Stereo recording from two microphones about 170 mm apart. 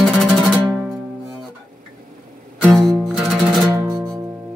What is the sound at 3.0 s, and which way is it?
Music, 5° right (ahead or behind).